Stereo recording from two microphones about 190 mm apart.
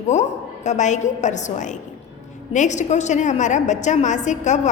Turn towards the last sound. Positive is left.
turn(degrees=40)  # may be behind; listen again after turning